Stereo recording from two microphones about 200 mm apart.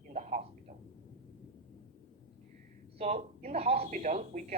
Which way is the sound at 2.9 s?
35° right (ahead or behind).